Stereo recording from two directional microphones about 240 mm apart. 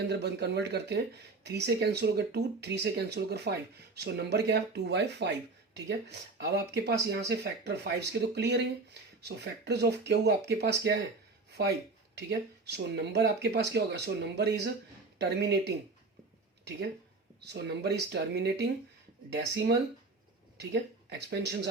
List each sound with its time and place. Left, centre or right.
0.1 s speech: right
12.1 s speech: right
17.4 s speech: right
21.1 s speech: right